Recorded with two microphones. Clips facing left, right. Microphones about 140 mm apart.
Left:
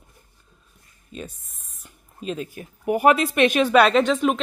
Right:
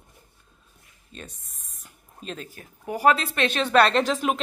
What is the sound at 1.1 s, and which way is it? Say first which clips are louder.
Speech: left 7 dB; 5° left (ahead or behind).